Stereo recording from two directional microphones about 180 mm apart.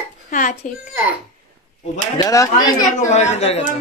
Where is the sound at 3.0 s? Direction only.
40° left (ahead or behind).